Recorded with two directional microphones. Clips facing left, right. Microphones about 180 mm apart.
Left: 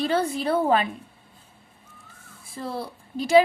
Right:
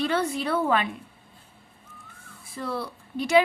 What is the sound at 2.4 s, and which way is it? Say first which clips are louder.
Speech: even; 30° left (ahead or behind).